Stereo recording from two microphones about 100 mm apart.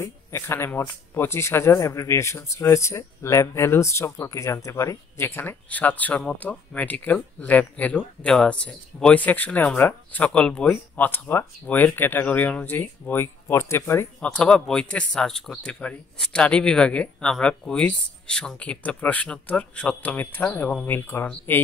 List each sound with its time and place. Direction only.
0.0 s speech: 25° left (ahead or behind)
14.2 s speech: 10° left (ahead or behind)